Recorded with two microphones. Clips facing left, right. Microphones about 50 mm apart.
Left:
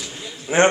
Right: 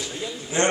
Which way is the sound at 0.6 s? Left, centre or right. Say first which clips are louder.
Left 6 dB; left.